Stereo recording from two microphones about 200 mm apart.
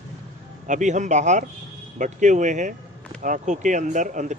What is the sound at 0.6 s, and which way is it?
Speech, 35° right (ahead or behind).